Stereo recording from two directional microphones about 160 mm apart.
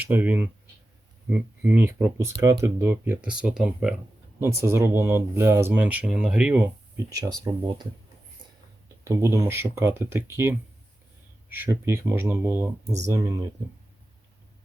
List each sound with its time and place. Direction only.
0.0 s speech: 10° right (ahead or behind)
4.4 s speech: 15° right (ahead or behind)
9.0 s speech: 15° right (ahead or behind)